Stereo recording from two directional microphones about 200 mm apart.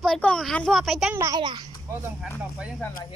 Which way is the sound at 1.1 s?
15° right (ahead or behind).